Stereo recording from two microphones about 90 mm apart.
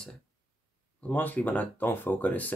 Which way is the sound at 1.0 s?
20° left (ahead or behind).